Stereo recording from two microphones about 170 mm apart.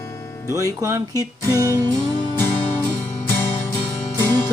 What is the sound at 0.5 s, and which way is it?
Speech, 20° right (ahead or behind).